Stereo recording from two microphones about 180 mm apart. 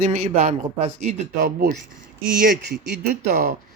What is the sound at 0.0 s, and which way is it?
A man's voice, 40° right (ahead or behind).